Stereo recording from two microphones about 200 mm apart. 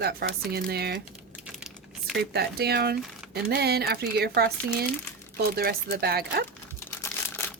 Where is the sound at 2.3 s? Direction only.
55° right (ahead or behind).